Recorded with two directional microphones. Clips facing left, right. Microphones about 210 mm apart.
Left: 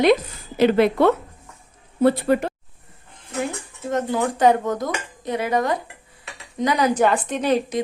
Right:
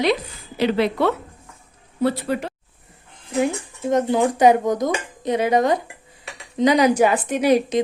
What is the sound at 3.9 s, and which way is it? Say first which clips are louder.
Speech: right 4 dB; 15° right (ahead or behind).